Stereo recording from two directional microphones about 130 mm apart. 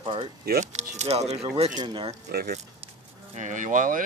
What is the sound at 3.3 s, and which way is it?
Speech, 70° right (ahead or behind).